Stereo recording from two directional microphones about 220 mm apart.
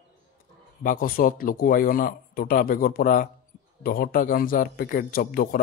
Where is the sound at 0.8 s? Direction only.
40° left (ahead or behind).